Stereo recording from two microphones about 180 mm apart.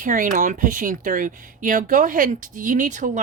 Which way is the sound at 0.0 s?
50° right (ahead or behind).